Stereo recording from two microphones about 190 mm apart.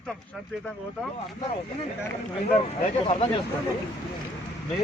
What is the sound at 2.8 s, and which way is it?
Speech, 30° left (ahead or behind).